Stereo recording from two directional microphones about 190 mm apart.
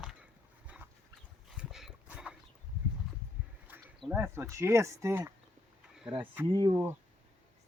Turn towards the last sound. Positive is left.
turn(degrees=-15)  # may be behind; listen again after turning